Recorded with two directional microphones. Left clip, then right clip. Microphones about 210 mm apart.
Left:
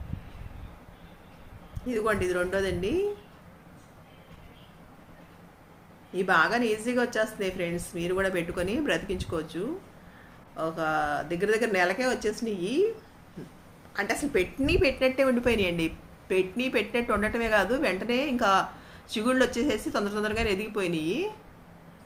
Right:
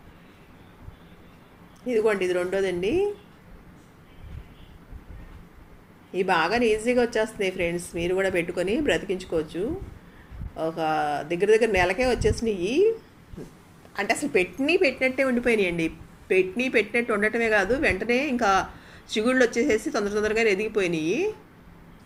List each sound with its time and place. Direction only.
1.9 s a woman's voice: centre (ahead or behind)
6.1 s a woman's voice: centre (ahead or behind)
13.9 s a woman's voice: 10° right (ahead or behind)
19.3 s speech: 60° left (ahead or behind)
19.5 s a woman's voice: centre (ahead or behind)